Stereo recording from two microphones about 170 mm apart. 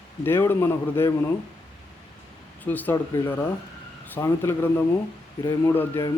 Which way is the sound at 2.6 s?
10° left (ahead or behind).